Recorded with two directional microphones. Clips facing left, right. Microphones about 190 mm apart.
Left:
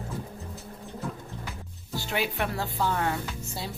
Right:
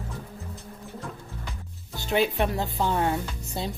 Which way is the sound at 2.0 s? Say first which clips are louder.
Right 5 dB; 20° right (ahead or behind).